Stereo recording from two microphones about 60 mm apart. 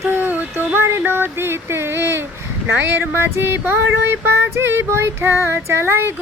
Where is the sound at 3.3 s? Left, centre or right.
Right.